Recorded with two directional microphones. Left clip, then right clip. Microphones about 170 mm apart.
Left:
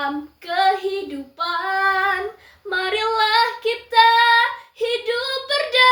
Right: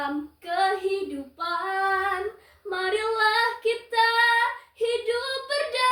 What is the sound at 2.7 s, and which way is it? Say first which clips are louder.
Child singing: left 5 dB; 15° right (ahead or behind).